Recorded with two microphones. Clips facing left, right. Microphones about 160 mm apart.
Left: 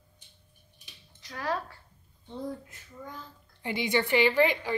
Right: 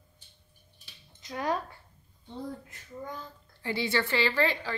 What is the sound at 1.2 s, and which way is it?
Speech, 20° right (ahead or behind).